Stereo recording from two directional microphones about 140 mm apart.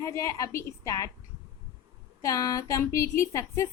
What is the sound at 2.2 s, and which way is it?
A woman's voice, 25° left (ahead or behind).